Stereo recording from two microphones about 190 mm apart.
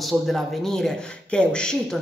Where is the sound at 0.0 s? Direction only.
Centre (ahead or behind).